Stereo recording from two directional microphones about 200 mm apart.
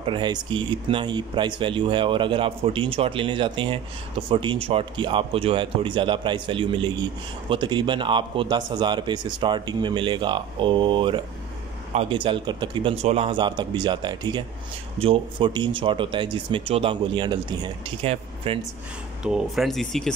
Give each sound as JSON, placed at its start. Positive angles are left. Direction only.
{"t": 0.0, "sound": "speech", "side_deg": -25}
{"t": 19.2, "sound": "speech", "side_deg": 0}